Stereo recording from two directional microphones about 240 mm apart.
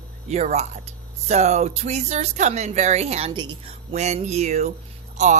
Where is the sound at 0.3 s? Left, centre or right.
Right.